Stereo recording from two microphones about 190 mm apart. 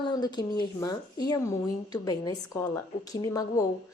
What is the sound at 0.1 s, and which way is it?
Speech, 20° left (ahead or behind).